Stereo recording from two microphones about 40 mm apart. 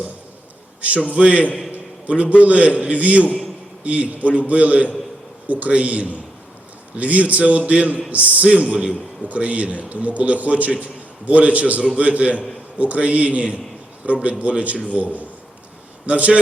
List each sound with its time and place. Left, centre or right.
1.1 s a man's voice: right